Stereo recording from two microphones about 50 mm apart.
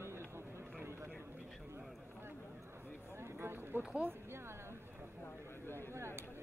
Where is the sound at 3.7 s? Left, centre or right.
Right.